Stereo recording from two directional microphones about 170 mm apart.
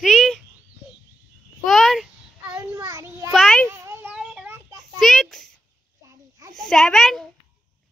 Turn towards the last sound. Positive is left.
turn(degrees=0)  # may be behind; listen again after turning